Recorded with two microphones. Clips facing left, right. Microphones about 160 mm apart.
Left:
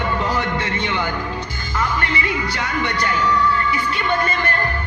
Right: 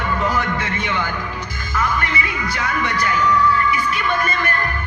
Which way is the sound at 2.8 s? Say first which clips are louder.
Even; 30° left (ahead or behind).